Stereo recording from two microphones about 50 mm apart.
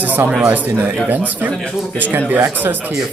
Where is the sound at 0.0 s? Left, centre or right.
Right.